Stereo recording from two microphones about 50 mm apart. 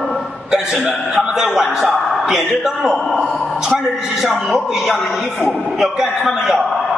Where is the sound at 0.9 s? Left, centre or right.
Centre.